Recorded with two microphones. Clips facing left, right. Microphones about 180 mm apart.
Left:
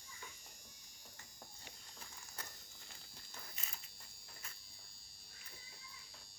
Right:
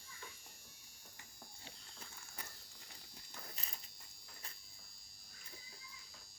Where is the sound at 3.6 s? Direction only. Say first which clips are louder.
Right 2 dB; 35° right (ahead or behind).